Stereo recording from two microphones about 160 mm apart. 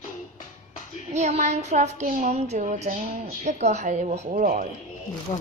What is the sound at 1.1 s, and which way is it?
A woman's voice, 45° right (ahead or behind).